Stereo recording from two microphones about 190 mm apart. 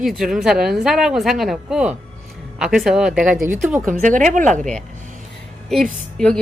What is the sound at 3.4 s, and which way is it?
Speech, 40° right (ahead or behind).